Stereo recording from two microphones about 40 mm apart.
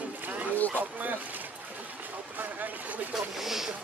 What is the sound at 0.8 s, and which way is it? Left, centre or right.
Speech, right.